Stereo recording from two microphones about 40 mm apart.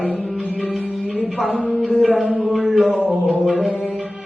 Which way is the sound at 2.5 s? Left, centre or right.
Centre.